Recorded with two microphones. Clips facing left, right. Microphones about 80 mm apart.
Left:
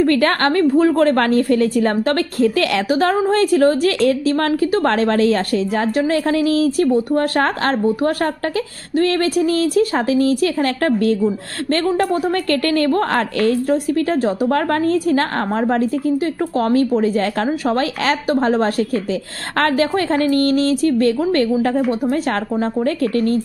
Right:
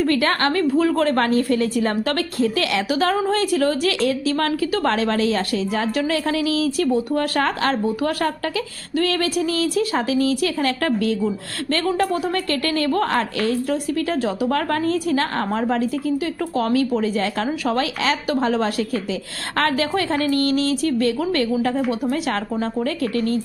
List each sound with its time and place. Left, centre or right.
0.0 s a woman's voice: left